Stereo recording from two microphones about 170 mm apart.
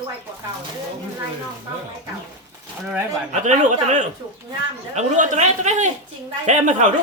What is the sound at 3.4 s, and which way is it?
A child's voice, 45° right (ahead or behind).